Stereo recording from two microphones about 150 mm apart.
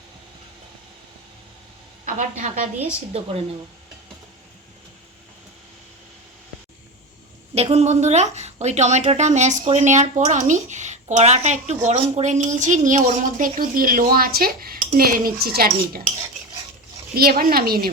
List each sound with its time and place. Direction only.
2.0 s a woman's voice: 55° right (ahead or behind)
7.5 s a woman's voice: 45° right (ahead or behind)
13.1 s dishes: 60° right (ahead or behind); by 16.0 s 90° right
17.2 s speech: 90° right